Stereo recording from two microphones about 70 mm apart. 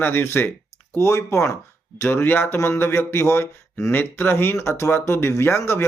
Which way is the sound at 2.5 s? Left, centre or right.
Left.